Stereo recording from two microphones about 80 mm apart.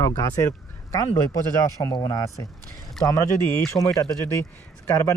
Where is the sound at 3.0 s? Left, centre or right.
Left.